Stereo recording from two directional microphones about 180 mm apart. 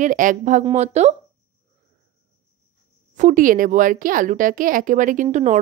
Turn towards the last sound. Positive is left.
turn(degrees=-40)  # may be behind; listen again after turning